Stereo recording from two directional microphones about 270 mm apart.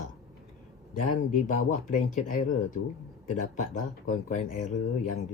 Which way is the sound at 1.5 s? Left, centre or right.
Left.